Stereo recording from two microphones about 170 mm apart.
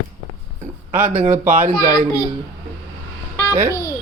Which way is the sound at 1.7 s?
25° left (ahead or behind).